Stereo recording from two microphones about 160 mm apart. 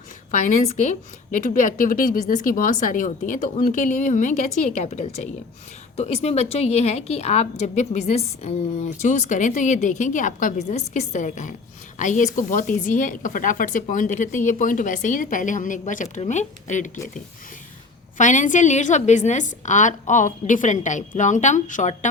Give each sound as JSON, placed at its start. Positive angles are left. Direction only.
{"t": 0.3, "sound": "a woman's voice", "side_deg": 50}
{"t": 18.2, "sound": "a woman's voice", "side_deg": 50}